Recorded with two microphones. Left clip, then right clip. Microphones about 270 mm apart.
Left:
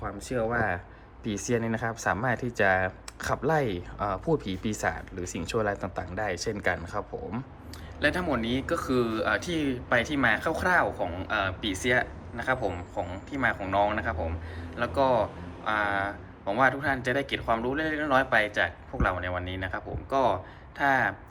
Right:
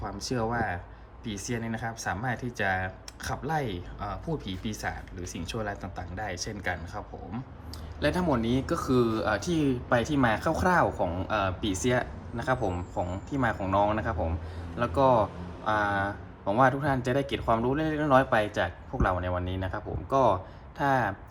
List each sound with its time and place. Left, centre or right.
0.3 s speech: centre
8.0 s a man's voice: right